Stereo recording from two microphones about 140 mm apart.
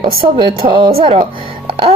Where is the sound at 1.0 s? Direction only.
40° right (ahead or behind).